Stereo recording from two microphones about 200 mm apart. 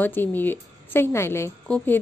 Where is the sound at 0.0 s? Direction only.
10° left (ahead or behind).